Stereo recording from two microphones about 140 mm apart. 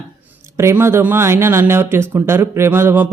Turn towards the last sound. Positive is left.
turn(degrees=-15)  # may be behind; listen again after turning